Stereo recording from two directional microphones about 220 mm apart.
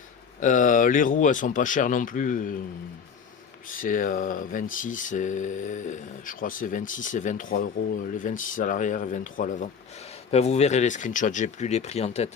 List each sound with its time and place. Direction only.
0.3 s speech: 35° left (ahead or behind)
3.8 s speech: 35° left (ahead or behind)